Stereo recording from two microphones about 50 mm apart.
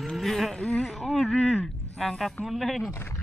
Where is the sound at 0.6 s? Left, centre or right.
Left.